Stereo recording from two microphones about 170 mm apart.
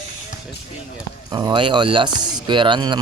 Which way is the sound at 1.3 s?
25° right (ahead or behind).